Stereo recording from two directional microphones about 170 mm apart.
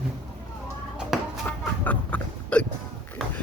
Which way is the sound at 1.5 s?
10° left (ahead or behind).